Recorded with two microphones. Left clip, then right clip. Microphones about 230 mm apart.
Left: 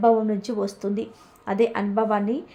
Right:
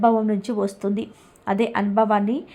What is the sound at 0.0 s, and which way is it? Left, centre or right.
A woman's voice, centre.